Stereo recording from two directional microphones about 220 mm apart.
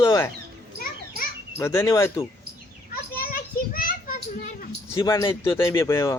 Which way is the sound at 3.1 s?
40° left (ahead or behind).